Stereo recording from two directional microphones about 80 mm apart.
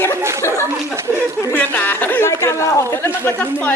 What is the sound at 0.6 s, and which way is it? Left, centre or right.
Speech, right.